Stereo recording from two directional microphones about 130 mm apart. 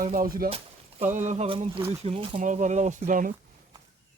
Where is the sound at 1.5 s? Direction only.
45° right (ahead or behind).